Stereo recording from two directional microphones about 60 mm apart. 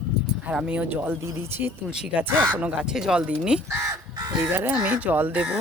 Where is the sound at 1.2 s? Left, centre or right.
Right.